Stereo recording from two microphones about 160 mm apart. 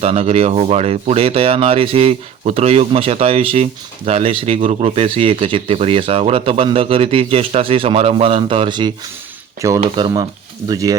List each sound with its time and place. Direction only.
0.0 s speech: 40° right (ahead or behind)
9.6 s speech: 20° right (ahead or behind)